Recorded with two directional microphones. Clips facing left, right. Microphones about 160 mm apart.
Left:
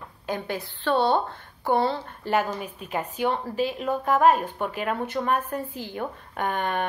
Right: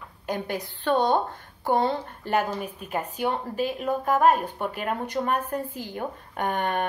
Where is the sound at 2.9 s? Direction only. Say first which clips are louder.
Left 1 dB; 10° right (ahead or behind).